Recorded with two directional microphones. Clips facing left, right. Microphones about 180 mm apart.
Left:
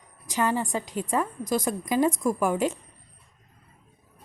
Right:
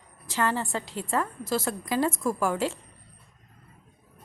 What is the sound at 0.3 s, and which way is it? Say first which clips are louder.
A woman's voice: left 2 dB; 15° left (ahead or behind).